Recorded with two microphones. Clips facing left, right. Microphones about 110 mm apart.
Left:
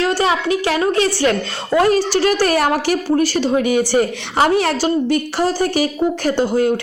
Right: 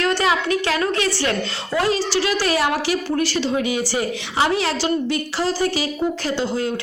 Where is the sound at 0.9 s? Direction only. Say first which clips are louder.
Left 5 dB; 40° left (ahead or behind).